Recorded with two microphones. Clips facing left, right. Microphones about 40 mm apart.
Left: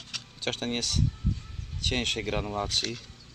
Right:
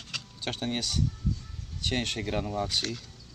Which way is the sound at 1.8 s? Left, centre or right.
Left.